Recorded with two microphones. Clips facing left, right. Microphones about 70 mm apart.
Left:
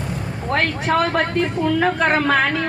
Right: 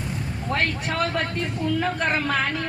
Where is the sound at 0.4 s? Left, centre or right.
Left.